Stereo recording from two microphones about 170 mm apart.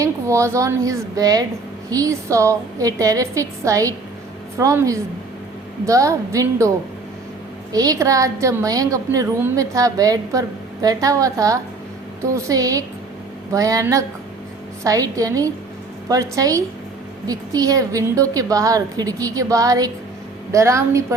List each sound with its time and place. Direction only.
0.0 s a woman's voice: 15° right (ahead or behind)